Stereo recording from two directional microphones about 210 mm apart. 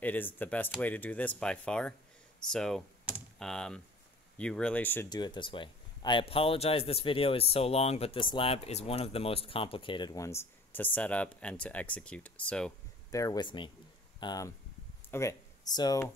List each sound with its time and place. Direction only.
0.0 s speech: 10° left (ahead or behind)
5.1 s speech: 20° left (ahead or behind); by 12.7 s 5° left (ahead or behind)
13.1 s speech: 15° left (ahead or behind)